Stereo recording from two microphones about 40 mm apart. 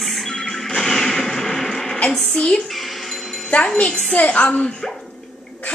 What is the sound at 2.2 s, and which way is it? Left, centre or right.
Speech, left.